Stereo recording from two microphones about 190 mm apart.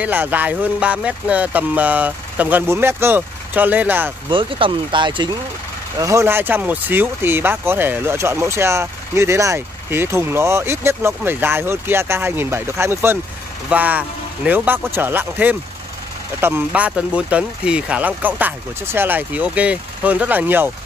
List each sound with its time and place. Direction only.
0.0 s speech: 10° right (ahead or behind)
4.3 s speech: 25° right (ahead or behind); by 20.7 s 10° right (ahead or behind)